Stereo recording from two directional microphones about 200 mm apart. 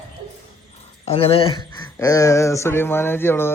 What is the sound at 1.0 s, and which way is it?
Speech, 30° left (ahead or behind).